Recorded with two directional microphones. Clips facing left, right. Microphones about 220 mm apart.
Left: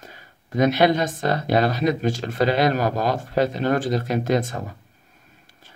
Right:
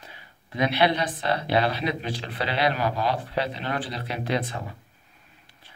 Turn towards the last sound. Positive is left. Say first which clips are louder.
# left 5 dB
turn(degrees=45)  # may be behind; listen again after turning